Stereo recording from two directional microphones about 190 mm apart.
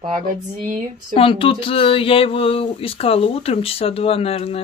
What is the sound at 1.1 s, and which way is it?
Speech, 30° left (ahead or behind).